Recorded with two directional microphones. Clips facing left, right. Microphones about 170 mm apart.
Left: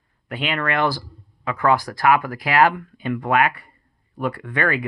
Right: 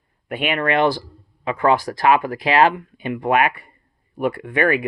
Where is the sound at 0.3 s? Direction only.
20° right (ahead or behind).